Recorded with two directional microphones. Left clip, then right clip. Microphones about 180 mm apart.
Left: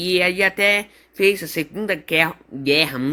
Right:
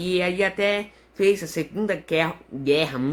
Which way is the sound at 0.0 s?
25° left (ahead or behind).